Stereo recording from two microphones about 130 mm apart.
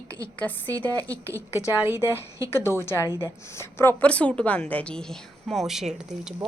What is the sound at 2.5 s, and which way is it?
Speech, 20° left (ahead or behind).